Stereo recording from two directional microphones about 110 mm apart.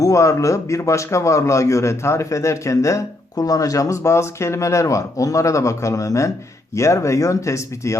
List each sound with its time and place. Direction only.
0.0 s a man's voice: 30° left (ahead or behind)